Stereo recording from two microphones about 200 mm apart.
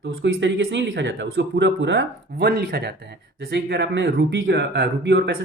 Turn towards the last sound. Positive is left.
turn(degrees=-55)  # may be behind; listen again after turning